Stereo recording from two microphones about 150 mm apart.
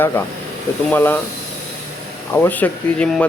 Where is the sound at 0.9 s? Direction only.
10° left (ahead or behind).